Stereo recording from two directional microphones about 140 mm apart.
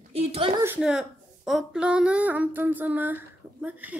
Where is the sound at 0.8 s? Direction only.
5° right (ahead or behind).